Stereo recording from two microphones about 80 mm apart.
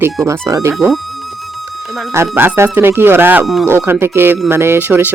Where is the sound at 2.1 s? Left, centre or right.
Right.